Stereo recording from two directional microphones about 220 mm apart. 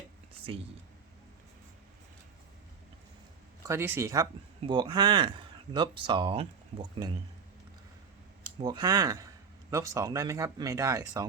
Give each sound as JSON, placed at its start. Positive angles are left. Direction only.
{"t": 3.7, "sound": "speech", "side_deg": -10}
{"t": 8.6, "sound": "a man's voice", "side_deg": -20}